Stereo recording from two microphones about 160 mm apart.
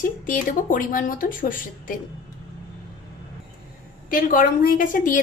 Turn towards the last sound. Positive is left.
turn(degrees=55)  # may be behind; listen again after turning